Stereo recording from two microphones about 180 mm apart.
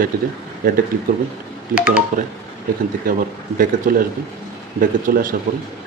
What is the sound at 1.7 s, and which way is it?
Speech, 5° right (ahead or behind).